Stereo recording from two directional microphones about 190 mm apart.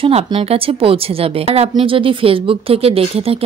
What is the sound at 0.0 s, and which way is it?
Speech, 30° right (ahead or behind).